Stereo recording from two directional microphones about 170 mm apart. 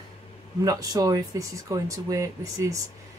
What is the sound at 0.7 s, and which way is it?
Speech, 20° right (ahead or behind).